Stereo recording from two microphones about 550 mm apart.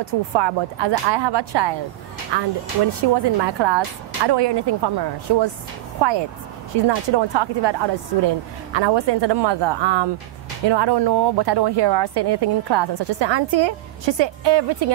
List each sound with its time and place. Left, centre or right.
0.0 s speech: right